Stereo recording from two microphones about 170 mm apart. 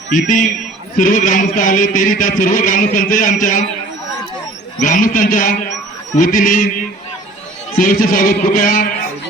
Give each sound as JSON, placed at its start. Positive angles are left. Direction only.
{"t": 0.1, "sound": "a man's voice", "side_deg": 50}
{"t": 4.8, "sound": "a man's voice", "side_deg": 50}
{"t": 7.8, "sound": "a man's voice", "side_deg": 55}